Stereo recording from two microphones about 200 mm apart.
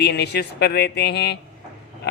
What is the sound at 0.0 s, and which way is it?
Speech, 55° left (ahead or behind).